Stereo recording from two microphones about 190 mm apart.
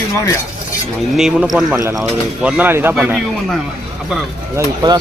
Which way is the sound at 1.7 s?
15° right (ahead or behind).